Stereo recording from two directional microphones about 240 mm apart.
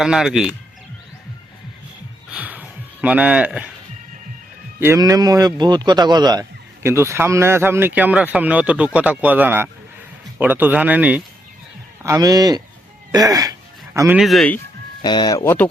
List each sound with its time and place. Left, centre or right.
0.0 s speech: centre
2.3 s a sound: centre
4.8 s speech: centre
13.1 s a sound: centre
14.2 s speech: centre
15.0 s speech: centre